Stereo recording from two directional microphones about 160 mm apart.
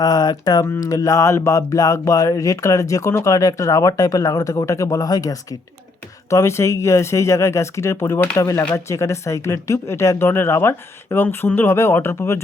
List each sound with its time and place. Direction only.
0.0 s speech: 25° left (ahead or behind)